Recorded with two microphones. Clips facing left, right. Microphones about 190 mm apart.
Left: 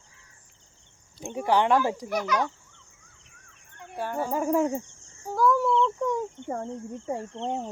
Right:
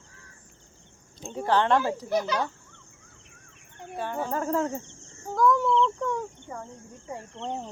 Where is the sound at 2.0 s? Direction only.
30° right (ahead or behind).